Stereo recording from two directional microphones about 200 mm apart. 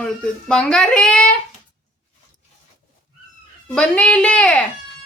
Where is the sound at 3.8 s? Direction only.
5° left (ahead or behind).